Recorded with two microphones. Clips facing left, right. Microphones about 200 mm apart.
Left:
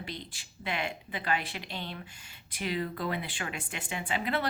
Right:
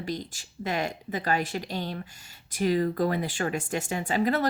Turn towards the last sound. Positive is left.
turn(degrees=-40)  # may be behind; listen again after turning